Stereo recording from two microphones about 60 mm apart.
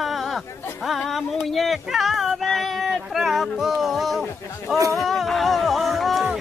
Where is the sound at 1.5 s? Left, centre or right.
Centre.